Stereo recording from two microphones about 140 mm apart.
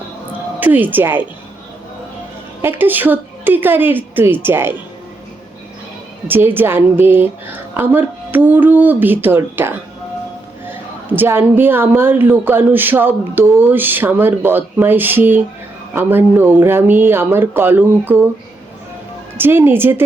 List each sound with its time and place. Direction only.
0.6 s a woman's voice: 15° right (ahead or behind)
2.6 s a woman's voice: 15° right (ahead or behind)
6.2 s a woman's voice: 15° right (ahead or behind)
19.4 s a woman's voice: 15° right (ahead or behind)